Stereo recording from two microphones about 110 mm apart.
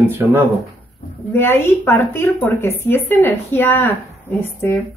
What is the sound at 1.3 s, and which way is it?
A woman's voice, 20° left (ahead or behind).